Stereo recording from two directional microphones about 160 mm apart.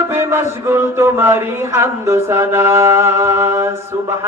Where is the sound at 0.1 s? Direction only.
15° right (ahead or behind).